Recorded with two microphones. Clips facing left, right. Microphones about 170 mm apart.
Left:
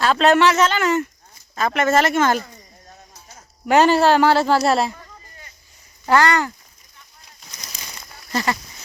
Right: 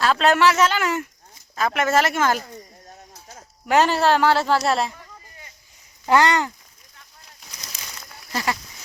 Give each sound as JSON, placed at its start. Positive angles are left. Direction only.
{"t": 0.0, "sound": "speech", "side_deg": 0}
{"t": 3.7, "sound": "speech", "side_deg": 0}
{"t": 6.1, "sound": "speech", "side_deg": -20}
{"t": 8.3, "sound": "a sound", "side_deg": -10}